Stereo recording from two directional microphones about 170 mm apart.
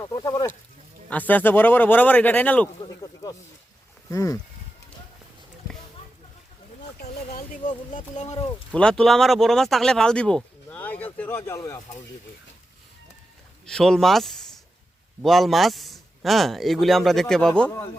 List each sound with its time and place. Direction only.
0.0 s speech: 20° left (ahead or behind)
1.1 s speech: 10° left (ahead or behind)
2.8 s a sound: 25° left (ahead or behind)
4.1 s speech: 20° left (ahead or behind)
7.3 s speech: 50° left (ahead or behind)
8.7 s speech: 5° left (ahead or behind)
13.7 s speech: centre (ahead or behind)